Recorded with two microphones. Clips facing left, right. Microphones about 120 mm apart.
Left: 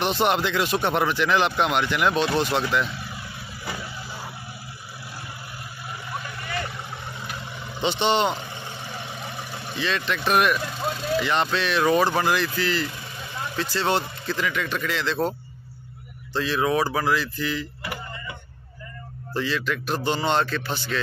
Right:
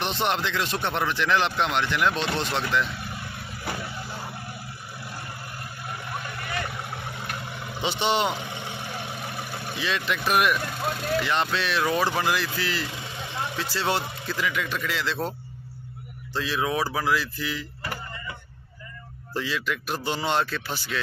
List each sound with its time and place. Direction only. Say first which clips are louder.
0.0 s speech: left 4 dB; 5° left (ahead or behind)
5.9 s vehicle: left 1 dB; centre (ahead or behind)
7.5 s speech: left 4 dB; 5° right (ahead or behind)
8.5 s vehicle: right 1 dB; 15° right (ahead or behind)
9.2 s speech: right 1 dB; 5° right (ahead or behind)
16.3 s speech: left 4 dB; 5° right (ahead or behind)
19.3 s speech: left 3 dB; 5° right (ahead or behind)